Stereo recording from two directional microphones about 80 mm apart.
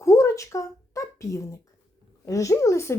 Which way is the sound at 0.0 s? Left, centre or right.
Left.